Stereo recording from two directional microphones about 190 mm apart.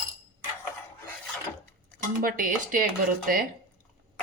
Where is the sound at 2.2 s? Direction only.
45° right (ahead or behind).